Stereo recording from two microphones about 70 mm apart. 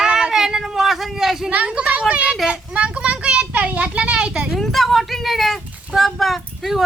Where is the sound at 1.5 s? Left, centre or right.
Centre.